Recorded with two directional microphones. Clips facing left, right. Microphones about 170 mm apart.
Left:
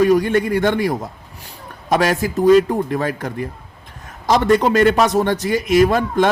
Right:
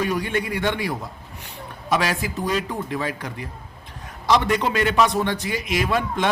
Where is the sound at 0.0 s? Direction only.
45° left (ahead or behind).